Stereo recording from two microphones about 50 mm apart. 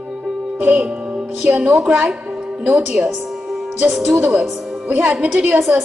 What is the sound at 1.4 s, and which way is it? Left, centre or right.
Speech, right.